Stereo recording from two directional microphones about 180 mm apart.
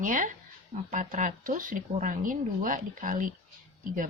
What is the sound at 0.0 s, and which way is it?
Speech, 45° right (ahead or behind).